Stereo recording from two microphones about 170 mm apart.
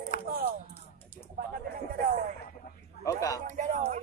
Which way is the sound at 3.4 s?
45° right (ahead or behind).